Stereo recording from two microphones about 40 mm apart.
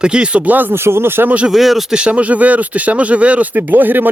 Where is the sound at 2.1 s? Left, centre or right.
Right.